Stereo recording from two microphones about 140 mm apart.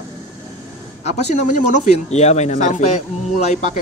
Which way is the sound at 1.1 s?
55° left (ahead or behind).